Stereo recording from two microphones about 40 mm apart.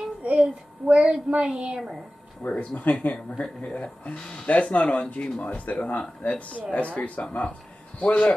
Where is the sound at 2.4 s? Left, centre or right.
Left.